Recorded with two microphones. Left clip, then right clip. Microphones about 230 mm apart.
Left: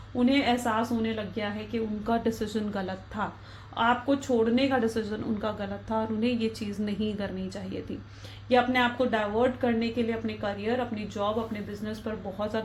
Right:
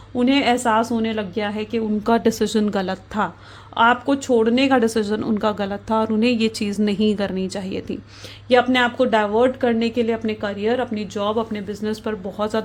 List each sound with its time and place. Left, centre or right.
0.2 s speech: right